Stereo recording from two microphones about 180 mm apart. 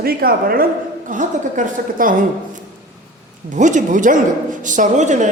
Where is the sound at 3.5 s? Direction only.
45° right (ahead or behind).